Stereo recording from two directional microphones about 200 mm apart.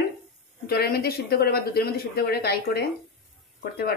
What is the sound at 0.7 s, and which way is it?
Speech, 50° left (ahead or behind).